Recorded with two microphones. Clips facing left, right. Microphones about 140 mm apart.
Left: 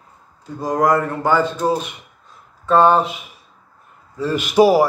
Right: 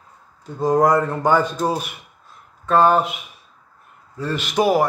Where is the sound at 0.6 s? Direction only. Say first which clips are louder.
Right 1 dB; 20° right (ahead or behind).